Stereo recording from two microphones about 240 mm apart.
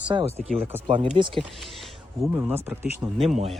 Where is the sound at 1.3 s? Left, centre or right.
Centre.